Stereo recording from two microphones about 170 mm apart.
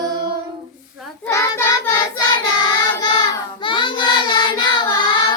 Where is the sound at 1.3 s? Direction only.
15° left (ahead or behind).